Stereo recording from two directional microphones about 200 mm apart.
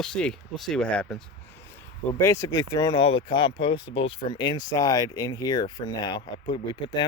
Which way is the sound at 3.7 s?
85° left.